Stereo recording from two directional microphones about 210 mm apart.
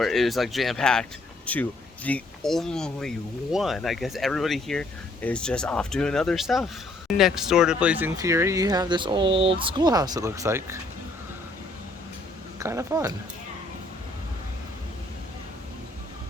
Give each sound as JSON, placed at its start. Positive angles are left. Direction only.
{"t": 0.0, "sound": "speech", "side_deg": 0}
{"t": 12.5, "sound": "speech", "side_deg": -15}